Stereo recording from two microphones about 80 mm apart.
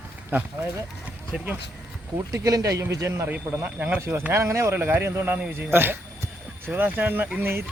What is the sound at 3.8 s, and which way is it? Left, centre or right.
Speech, right.